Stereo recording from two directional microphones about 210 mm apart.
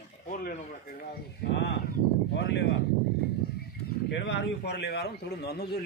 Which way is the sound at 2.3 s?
55° left (ahead or behind).